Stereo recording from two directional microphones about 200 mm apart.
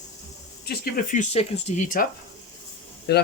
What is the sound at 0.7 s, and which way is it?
Speech, 50° left (ahead or behind).